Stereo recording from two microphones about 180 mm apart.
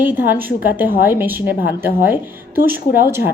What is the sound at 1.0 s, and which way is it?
Speech, 10° right (ahead or behind).